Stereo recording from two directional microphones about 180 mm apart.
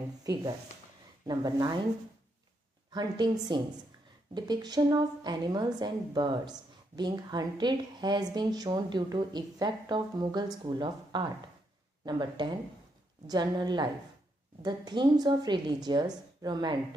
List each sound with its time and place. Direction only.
0.2 s a woman's voice: 20° right (ahead or behind)
2.9 s a woman's voice: 25° right (ahead or behind)